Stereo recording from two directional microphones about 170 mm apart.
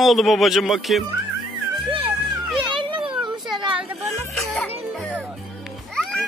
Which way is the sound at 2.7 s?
30° right (ahead or behind).